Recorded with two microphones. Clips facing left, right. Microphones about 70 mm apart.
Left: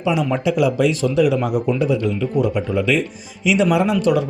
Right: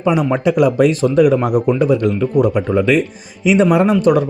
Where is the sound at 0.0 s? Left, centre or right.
Right.